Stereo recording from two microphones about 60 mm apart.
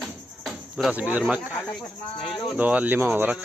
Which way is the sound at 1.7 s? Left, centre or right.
Centre.